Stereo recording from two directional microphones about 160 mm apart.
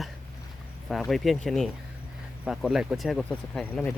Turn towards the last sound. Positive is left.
turn(degrees=10)  # may be behind; listen again after turning